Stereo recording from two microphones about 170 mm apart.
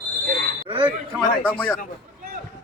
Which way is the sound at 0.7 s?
30° right (ahead or behind).